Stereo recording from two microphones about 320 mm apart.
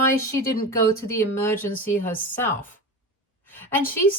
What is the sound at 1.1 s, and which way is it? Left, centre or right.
A woman's voice, centre.